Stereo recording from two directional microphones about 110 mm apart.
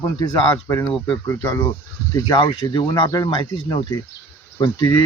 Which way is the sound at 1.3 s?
25° left (ahead or behind).